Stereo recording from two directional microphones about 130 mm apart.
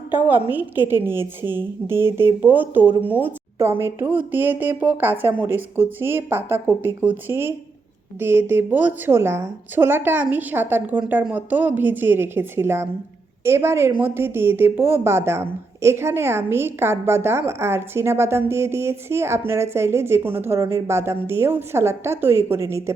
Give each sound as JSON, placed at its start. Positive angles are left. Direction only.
{"t": 0.3, "sound": "a woman's voice", "side_deg": -15}